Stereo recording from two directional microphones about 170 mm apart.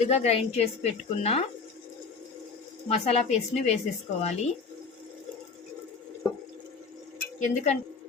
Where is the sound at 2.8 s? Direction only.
40° left (ahead or behind).